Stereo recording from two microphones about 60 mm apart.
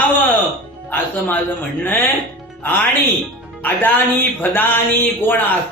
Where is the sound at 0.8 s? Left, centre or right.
Left.